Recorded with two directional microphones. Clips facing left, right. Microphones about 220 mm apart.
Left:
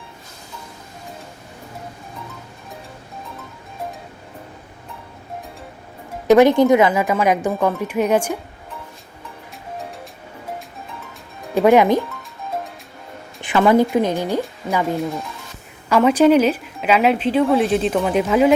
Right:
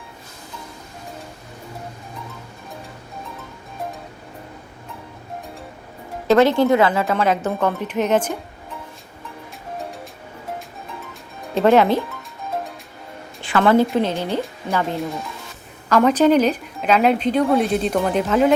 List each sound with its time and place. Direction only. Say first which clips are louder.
6.2 s speech: left 3 dB; 15° left (ahead or behind)
11.5 s speech: left 2 dB; 15° left (ahead or behind)
13.4 s a sound: left 1 dB; 15° left (ahead or behind)
13.9 s speech: left 2 dB; 15° left (ahead or behind)
15.9 s speech: left 2 dB; 5° left (ahead or behind)